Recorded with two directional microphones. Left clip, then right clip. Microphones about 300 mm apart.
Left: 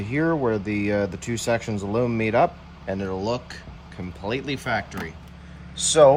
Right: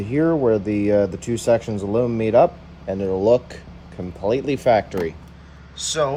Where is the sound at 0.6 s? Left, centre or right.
Centre.